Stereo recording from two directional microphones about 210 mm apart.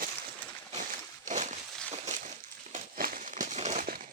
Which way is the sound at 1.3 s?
35° right (ahead or behind).